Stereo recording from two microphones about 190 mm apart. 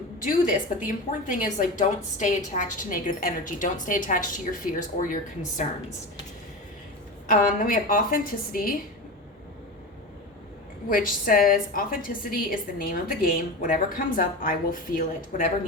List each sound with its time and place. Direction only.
0.2 s a woman's voice: 45° left (ahead or behind)
7.3 s a woman's voice: 45° left (ahead or behind)
10.8 s a woman's voice: 50° left (ahead or behind)